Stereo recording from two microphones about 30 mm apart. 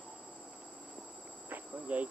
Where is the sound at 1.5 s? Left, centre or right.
Right.